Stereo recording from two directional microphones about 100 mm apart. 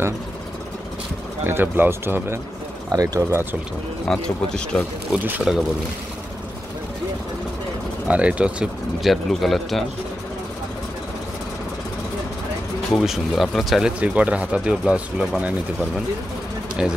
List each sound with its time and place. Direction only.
1.4 s speech: 20° right (ahead or behind)
4.1 s a man's voice: 10° left (ahead or behind)
5.1 s speech: 20° right (ahead or behind)
8.1 s speech: 10° right (ahead or behind)
9.0 s speech: centre (ahead or behind)
12.9 s speech: centre (ahead or behind)
13.9 s speech: 10° right (ahead or behind)
16.8 s speech: 10° right (ahead or behind)